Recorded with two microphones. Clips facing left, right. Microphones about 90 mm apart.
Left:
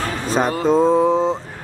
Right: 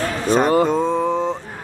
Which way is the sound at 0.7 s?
5° left (ahead or behind).